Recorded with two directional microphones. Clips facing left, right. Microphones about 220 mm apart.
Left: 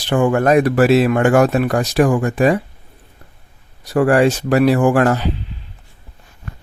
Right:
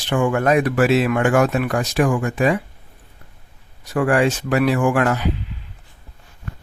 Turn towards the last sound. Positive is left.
turn(degrees=35)  # may be behind; listen again after turning